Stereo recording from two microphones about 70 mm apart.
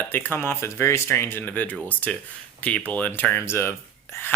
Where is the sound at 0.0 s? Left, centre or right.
Left.